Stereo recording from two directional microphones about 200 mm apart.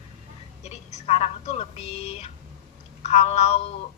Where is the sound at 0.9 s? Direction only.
30° left (ahead or behind).